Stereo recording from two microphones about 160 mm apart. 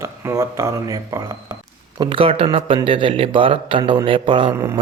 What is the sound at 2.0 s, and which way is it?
Speech, 35° right (ahead or behind).